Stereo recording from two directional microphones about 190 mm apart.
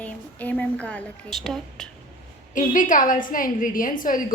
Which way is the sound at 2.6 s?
45° left (ahead or behind).